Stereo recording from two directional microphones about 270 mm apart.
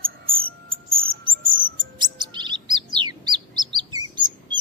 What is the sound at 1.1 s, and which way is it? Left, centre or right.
Bird, right.